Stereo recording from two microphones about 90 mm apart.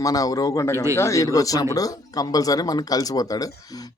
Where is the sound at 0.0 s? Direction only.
40° left (ahead or behind).